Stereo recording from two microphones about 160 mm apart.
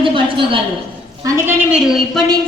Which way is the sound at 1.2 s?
15° right (ahead or behind).